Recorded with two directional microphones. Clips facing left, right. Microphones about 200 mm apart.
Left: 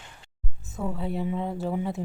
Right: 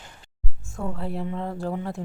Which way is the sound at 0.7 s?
Centre (ahead or behind).